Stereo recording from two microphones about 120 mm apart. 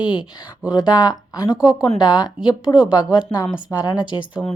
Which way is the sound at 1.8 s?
35° left (ahead or behind).